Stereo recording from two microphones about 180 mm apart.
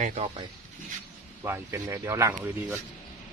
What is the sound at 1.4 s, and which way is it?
Speech, 15° right (ahead or behind).